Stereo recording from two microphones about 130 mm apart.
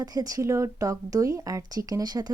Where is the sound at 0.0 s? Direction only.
30° right (ahead or behind).